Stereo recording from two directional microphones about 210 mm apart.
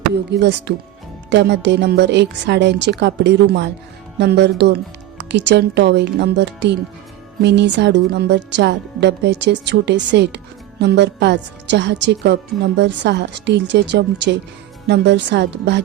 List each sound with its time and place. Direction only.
0.1 s speech: 55° right (ahead or behind)